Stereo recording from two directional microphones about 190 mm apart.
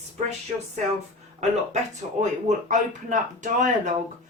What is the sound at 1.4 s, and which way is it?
Speech, 40° right (ahead or behind).